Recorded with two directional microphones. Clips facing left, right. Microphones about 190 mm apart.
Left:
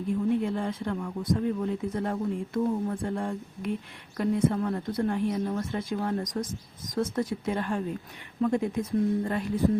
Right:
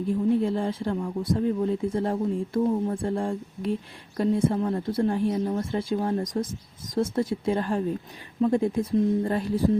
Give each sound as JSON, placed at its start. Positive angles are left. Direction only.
{"t": 0.1, "sound": "a woman's voice", "side_deg": -30}